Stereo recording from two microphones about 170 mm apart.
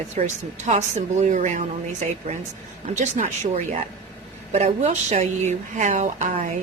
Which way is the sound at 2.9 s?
45° right (ahead or behind).